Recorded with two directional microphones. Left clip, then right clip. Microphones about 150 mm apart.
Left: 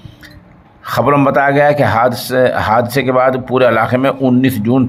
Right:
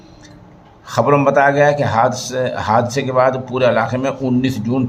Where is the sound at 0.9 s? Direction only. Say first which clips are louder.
Left 2 dB; 40° left (ahead or behind).